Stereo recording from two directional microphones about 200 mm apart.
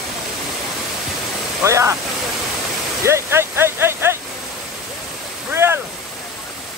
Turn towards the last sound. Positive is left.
turn(degrees=-10)  # may be behind; listen again after turning